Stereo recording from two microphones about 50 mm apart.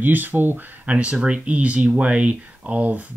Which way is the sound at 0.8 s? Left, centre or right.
Right.